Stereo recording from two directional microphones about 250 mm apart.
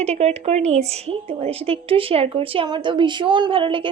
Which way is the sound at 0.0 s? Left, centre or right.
Right.